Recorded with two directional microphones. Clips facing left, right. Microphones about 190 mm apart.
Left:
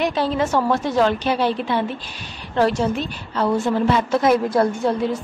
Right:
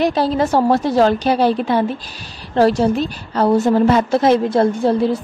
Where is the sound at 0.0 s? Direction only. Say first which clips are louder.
Right 4 dB; 35° right (ahead or behind).